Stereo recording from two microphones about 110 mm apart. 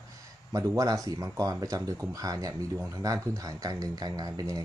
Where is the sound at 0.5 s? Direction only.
30° right (ahead or behind).